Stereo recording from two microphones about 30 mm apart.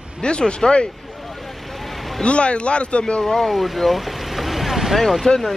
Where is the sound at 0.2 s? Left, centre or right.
Left.